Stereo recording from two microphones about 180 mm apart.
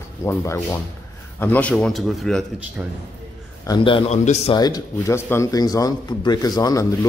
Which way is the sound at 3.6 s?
25° left (ahead or behind).